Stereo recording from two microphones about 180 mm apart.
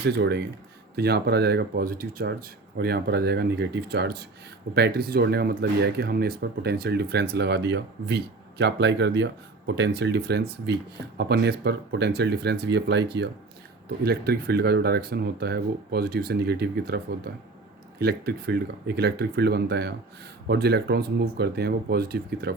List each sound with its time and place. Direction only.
0.0 s speech: 70° right (ahead or behind)